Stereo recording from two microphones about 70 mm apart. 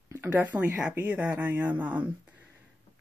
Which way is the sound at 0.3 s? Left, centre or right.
Right.